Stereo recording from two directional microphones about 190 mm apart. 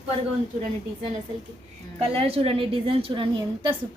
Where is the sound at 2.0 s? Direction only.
30° right (ahead or behind).